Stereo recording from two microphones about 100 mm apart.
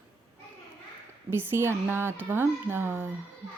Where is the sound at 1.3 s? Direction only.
20° right (ahead or behind).